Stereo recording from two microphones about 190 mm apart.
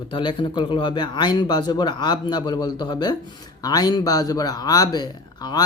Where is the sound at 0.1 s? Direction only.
25° left (ahead or behind).